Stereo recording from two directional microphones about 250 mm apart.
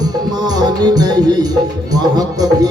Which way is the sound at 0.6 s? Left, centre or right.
Centre.